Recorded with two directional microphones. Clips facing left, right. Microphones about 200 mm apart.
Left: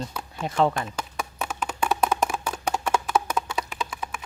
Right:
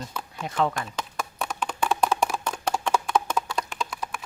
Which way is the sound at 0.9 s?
5° left (ahead or behind).